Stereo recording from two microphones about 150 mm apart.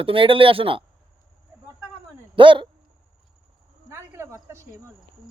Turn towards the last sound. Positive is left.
turn(degrees=-20)  # may be behind; listen again after turning